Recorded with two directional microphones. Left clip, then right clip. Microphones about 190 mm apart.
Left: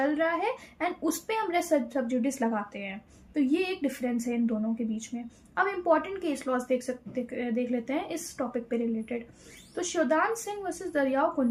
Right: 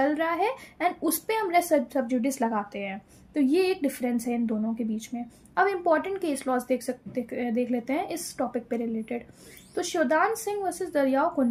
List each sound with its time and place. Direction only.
0.0 s a woman's voice: 45° right (ahead or behind)